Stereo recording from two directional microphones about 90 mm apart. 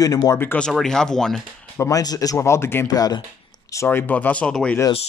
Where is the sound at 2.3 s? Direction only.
30° left (ahead or behind).